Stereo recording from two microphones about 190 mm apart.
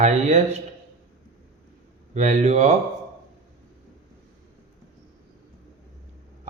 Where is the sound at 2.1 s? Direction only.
40° right (ahead or behind).